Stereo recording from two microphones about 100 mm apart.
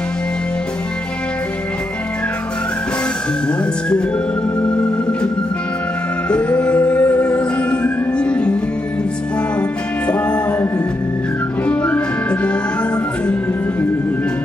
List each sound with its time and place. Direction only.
6.2 s music: 10° left (ahead or behind)
9.6 s music: 10° left (ahead or behind)
11.6 s music: 15° left (ahead or behind)